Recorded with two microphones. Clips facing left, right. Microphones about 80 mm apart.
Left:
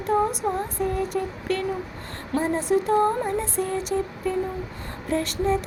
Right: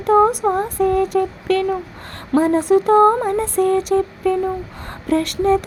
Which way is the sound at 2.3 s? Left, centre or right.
Right.